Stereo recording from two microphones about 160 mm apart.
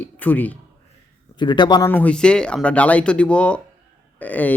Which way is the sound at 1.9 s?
10° left (ahead or behind).